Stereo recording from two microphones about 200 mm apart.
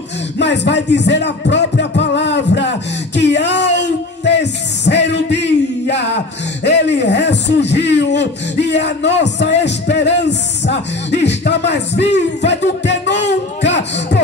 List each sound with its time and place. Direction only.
0.4 s music: 60° left (ahead or behind)
6.9 s speech: 60° left (ahead or behind)